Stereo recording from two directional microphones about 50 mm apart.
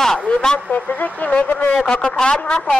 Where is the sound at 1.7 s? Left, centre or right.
Centre.